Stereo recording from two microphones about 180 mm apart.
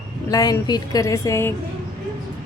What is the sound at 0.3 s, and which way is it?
A woman's voice, 20° left (ahead or behind).